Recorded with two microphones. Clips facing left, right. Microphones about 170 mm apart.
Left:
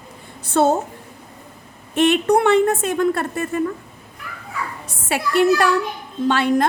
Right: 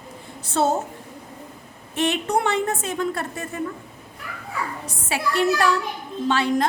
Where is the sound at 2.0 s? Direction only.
60° left (ahead or behind).